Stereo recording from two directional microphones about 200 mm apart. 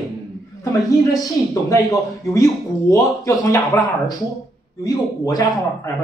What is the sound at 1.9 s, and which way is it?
Speech, 15° left (ahead or behind).